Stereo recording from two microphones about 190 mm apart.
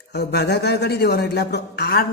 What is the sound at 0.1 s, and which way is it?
A man's voice, 60° left (ahead or behind).